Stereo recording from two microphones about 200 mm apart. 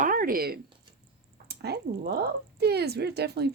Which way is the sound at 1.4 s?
55° right (ahead or behind).